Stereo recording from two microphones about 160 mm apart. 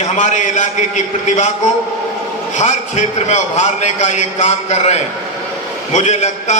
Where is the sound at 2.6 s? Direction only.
45° left (ahead or behind).